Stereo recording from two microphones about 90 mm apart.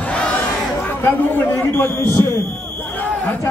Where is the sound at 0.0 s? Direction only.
15° left (ahead or behind).